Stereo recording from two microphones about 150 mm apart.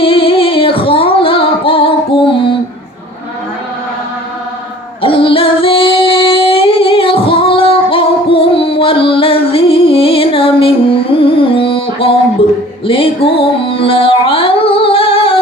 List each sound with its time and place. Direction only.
0.0 s music: 35° left (ahead or behind)
5.0 s female singing: 35° left (ahead or behind)
12.4 s a sound: 35° left (ahead or behind)
12.8 s music: 35° left (ahead or behind)